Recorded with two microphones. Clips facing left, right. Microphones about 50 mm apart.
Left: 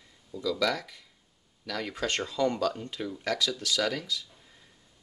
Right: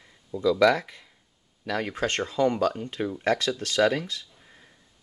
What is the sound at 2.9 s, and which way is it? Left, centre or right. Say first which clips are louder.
Speech: right 6 dB; right.